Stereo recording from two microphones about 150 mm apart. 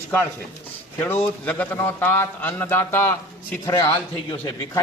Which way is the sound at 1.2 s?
10° left (ahead or behind).